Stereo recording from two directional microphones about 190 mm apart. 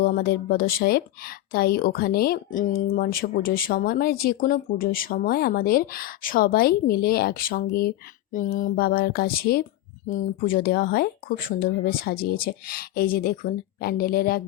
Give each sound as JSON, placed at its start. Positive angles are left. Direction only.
{"t": 0.0, "sound": "speech", "side_deg": 55}